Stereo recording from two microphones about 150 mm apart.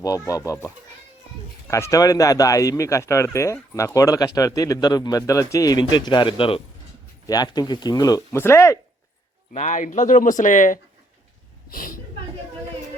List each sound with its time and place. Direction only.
0.0 s speech: 25° left (ahead or behind)
9.5 s speech: 55° left (ahead or behind)
11.7 s a woman's voice: 70° left (ahead or behind)